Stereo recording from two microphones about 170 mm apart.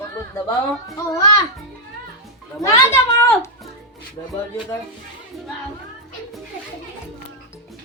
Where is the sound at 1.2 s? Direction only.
20° left (ahead or behind).